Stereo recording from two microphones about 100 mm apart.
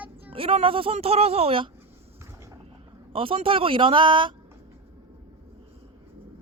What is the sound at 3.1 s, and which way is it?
A man's voice, 65° right (ahead or behind).